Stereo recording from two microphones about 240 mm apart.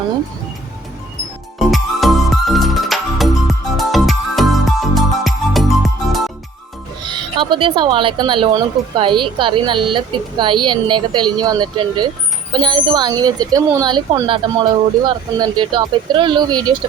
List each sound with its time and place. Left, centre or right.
1.5 s music: centre
7.1 s a woman's voice: centre